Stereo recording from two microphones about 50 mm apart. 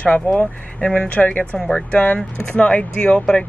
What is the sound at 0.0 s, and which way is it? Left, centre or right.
A woman's voice, left.